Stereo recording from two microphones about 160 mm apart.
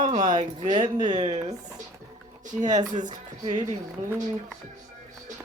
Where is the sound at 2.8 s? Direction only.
25° right (ahead or behind).